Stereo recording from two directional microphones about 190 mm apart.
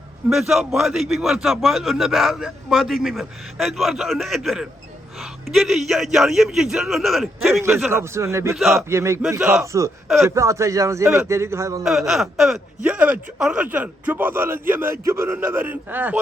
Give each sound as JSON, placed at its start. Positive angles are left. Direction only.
{"t": 0.3, "sound": "a man's voice", "side_deg": 0}
{"t": 7.6, "sound": "speech", "side_deg": -10}
{"t": 8.5, "sound": "a man's voice", "side_deg": 0}
{"t": 8.9, "sound": "speech", "side_deg": -15}
{"t": 11.9, "sound": "speech", "side_deg": 0}